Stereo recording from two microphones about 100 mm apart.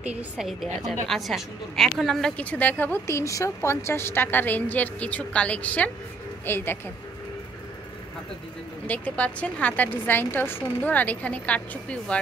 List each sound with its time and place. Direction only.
0.0 s a woman's voice: 15° right (ahead or behind)
0.5 s a woman's voice: centre (ahead or behind); by 3.0 s 15° left (ahead or behind)
3.1 s a woman's voice: 30° left (ahead or behind)
8.8 s a woman's voice: 15° left (ahead or behind)